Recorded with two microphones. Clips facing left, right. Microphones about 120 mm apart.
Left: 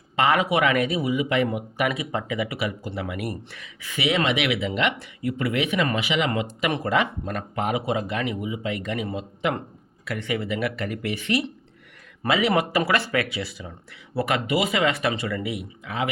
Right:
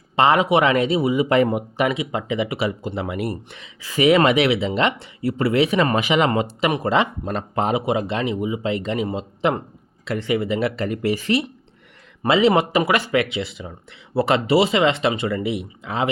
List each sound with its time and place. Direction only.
0.2 s speech: 25° right (ahead or behind)
1.8 s speech: 20° right (ahead or behind)
4.0 s speech: 50° right (ahead or behind)
4.4 s speech: 30° right (ahead or behind)
6.7 s speech: 25° right (ahead or behind)